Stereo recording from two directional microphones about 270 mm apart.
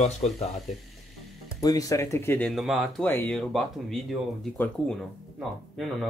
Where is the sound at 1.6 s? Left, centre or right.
Centre.